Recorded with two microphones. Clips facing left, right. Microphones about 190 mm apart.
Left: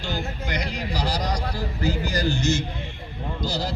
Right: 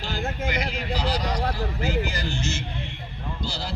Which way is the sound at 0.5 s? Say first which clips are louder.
Even; 40° left (ahead or behind).